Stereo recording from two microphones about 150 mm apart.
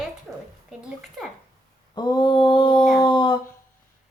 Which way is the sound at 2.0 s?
30° left (ahead or behind).